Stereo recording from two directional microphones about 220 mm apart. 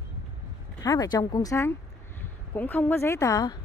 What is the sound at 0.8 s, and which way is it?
Speech, 20° left (ahead or behind).